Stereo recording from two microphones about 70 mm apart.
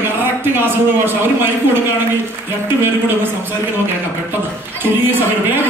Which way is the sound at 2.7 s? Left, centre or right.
Right.